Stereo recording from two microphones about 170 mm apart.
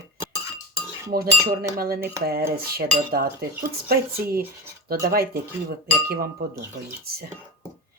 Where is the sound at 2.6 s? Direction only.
65° right (ahead or behind).